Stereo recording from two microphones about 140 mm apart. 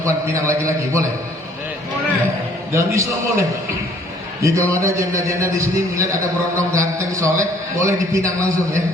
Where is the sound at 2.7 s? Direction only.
20° right (ahead or behind).